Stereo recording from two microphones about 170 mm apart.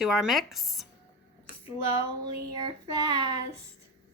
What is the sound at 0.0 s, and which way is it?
Speech, centre (ahead or behind).